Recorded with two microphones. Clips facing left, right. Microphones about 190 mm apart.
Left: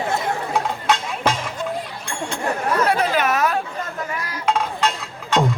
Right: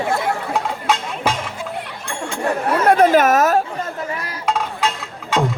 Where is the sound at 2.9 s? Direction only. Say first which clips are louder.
Right 7 dB; 50° right (ahead or behind).